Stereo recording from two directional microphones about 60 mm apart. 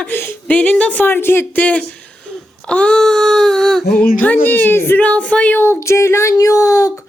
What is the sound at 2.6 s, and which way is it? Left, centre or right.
Speech, centre.